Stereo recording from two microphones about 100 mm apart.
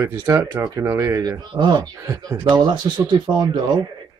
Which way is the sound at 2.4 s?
45° right (ahead or behind).